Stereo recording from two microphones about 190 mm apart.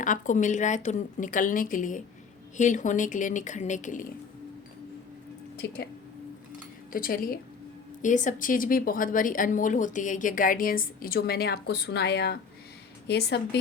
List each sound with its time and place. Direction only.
0.0 s a woman's voice: 40° left (ahead or behind)
5.6 s a woman's voice: 55° left (ahead or behind)
6.9 s a woman's voice: 50° left (ahead or behind)